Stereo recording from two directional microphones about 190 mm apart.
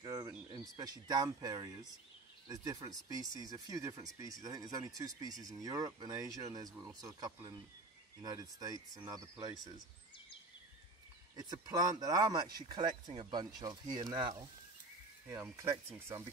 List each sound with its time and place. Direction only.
0.0 s bird: 20° right (ahead or behind)
0.5 s speech: 20° right (ahead or behind)
11.3 s speech: 20° right (ahead or behind)